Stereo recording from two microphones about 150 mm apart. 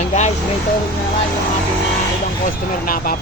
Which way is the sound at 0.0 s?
50° left (ahead or behind).